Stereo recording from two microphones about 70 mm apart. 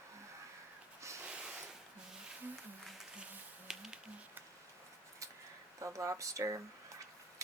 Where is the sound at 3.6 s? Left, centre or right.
Centre.